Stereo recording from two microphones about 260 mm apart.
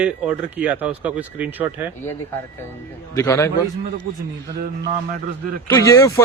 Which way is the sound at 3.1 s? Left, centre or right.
Centre.